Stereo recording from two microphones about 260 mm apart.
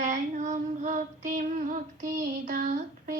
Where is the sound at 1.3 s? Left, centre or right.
Right.